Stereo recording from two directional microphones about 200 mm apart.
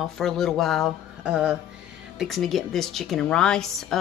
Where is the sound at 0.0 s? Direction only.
Centre (ahead or behind).